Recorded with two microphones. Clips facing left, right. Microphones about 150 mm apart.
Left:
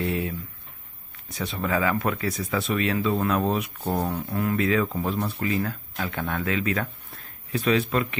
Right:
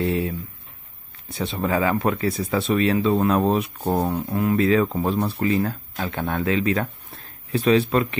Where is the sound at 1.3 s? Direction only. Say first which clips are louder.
Right 3 dB; 25° right (ahead or behind).